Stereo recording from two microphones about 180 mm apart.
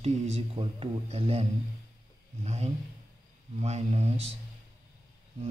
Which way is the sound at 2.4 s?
40° right (ahead or behind).